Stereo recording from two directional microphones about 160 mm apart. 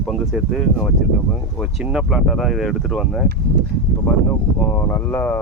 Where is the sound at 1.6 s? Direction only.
5° right (ahead or behind).